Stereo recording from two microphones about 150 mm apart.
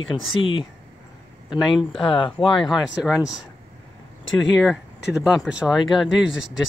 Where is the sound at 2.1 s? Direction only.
35° left (ahead or behind).